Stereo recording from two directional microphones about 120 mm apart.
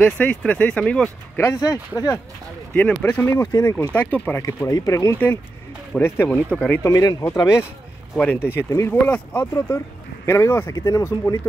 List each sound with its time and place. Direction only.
0.0 s speech: 10° left (ahead or behind)
1.4 s speech: 30° left (ahead or behind)
2.7 s speech: 10° left (ahead or behind)
4.4 s speech: 30° left (ahead or behind)
8.2 s speech: 15° left (ahead or behind)
8.6 s speech: 30° left (ahead or behind)
9.0 s speech: 15° left (ahead or behind)